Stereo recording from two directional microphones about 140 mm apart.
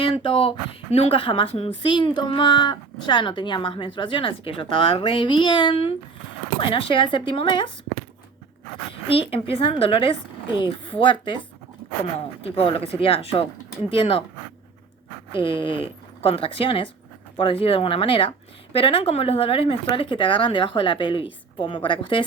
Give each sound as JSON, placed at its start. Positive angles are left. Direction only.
{"t": 0.0, "sound": "speech", "side_deg": 40}
{"t": 8.9, "sound": "speech", "side_deg": 40}
{"t": 12.4, "sound": "speech", "side_deg": 45}
{"t": 15.3, "sound": "speech", "side_deg": 40}